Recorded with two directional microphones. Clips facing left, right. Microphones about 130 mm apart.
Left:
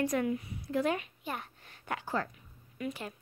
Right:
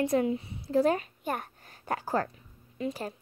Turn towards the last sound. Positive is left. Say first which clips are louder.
# right 4 dB
turn(degrees=-35)  # may be behind; listen again after turning